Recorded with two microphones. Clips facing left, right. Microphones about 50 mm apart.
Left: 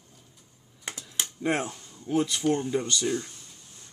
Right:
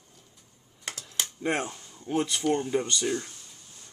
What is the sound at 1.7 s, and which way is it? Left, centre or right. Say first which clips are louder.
Speech: left 2 dB; centre.